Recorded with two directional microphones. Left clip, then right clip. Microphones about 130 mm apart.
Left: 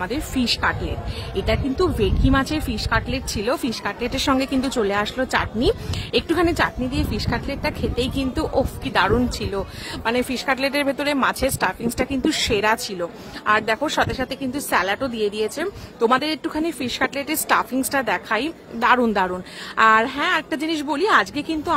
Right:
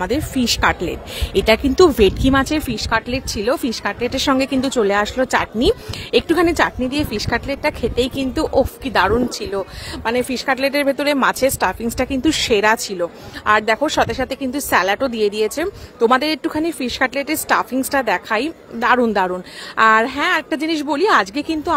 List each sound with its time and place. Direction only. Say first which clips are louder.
0.4 s speech: right 4 dB; 50° right (ahead or behind)
1.4 s speech: right 9 dB; 65° right (ahead or behind); by 11.1 s 40° right (ahead or behind)
11.1 s speech: right 5 dB; 55° right (ahead or behind)
13.7 s speech: right 4 dB; 45° right (ahead or behind)